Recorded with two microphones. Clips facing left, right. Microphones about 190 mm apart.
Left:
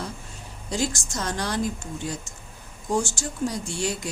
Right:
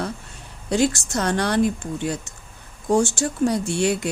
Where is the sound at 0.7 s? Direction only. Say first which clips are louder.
Right 7 dB; 65° right (ahead or behind).